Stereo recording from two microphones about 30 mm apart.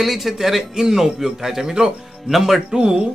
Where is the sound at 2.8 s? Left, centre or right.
Right.